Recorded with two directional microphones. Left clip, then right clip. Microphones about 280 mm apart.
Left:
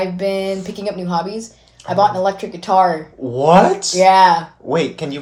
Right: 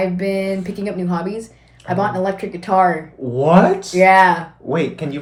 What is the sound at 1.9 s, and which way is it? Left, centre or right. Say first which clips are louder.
Speech: left 4 dB; centre.